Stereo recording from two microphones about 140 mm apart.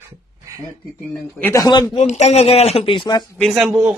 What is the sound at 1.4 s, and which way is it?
Speech, 25° left (ahead or behind).